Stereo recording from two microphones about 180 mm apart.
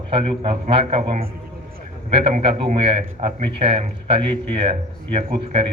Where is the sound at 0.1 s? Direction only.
30° right (ahead or behind).